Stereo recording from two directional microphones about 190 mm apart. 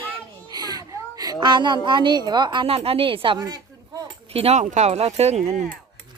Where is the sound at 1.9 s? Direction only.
25° right (ahead or behind).